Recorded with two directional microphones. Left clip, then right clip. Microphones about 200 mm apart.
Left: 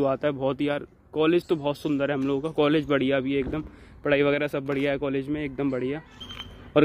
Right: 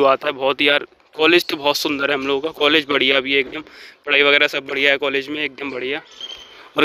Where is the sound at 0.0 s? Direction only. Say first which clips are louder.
Right 9 dB; 10° right (ahead or behind).